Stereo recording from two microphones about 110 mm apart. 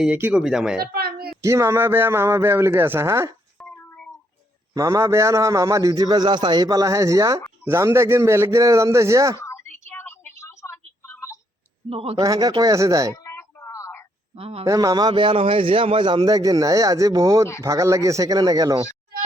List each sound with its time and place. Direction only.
0.0 s speech: 15° right (ahead or behind)
1.4 s a man's voice: 30° right (ahead or behind)
3.6 s a sound: 10° left (ahead or behind)
4.7 s a man's voice: 30° right (ahead or behind)
9.9 s a sound: 20° left (ahead or behind)
11.9 s a man's voice: 60° right (ahead or behind)
12.2 s a man's voice: 30° right (ahead or behind)
13.2 s a sound: 25° left (ahead or behind)
14.3 s a man's voice: 60° right (ahead or behind)
14.6 s a man's voice: 30° right (ahead or behind)